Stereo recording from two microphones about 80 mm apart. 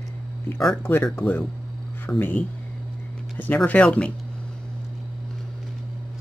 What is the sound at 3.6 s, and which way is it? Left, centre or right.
Speech, centre.